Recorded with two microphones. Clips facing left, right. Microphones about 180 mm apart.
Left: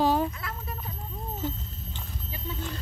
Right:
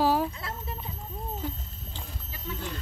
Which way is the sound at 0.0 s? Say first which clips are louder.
Left 1 dB; 5° right (ahead or behind).